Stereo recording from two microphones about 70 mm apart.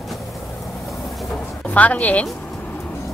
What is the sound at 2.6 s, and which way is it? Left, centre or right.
Vehicle, left.